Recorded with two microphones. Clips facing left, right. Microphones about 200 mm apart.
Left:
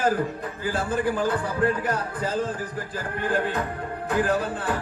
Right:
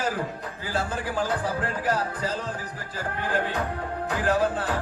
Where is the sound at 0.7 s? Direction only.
55° left (ahead or behind).